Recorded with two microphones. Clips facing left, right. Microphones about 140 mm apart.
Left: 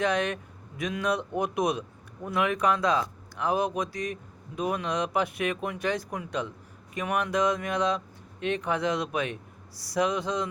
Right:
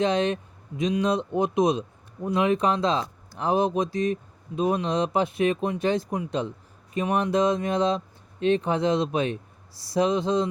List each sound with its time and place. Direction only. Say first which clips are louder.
0.0 s speech: right 4 dB; 25° right (ahead or behind)